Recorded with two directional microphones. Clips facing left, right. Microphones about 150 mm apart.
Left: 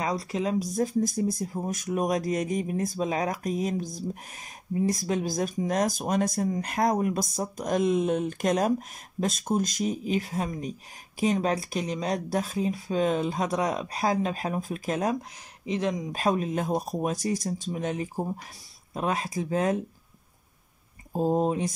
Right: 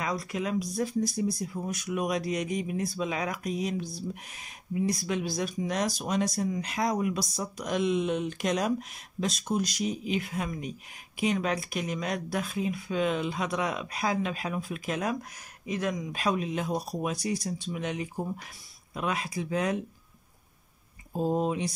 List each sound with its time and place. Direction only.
0.0 s speech: 30° left (ahead or behind)
15.6 s speech: 25° left (ahead or behind)
21.1 s speech: 40° left (ahead or behind)